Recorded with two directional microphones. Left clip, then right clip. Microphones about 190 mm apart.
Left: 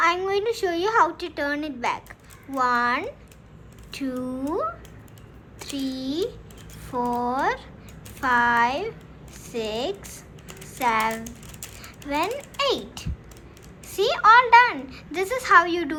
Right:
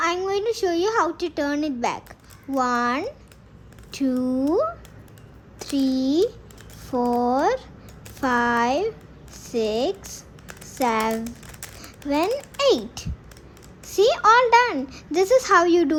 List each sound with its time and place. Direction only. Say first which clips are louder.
0.0 s a woman's voice: left 1 dB; 30° right (ahead or behind)
5.5 s a woman's voice: right 7 dB; 35° right (ahead or behind)